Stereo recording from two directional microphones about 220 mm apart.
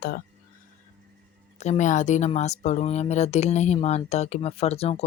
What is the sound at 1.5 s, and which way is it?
Speech, 30° left (ahead or behind).